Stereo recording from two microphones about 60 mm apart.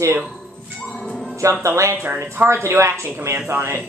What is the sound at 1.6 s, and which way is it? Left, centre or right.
Speech, right.